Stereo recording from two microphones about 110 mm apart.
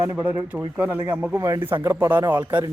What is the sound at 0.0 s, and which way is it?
Speech, 20° right (ahead or behind).